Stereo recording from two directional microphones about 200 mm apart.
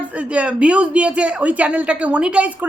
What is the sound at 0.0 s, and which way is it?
Speech, 5° right (ahead or behind).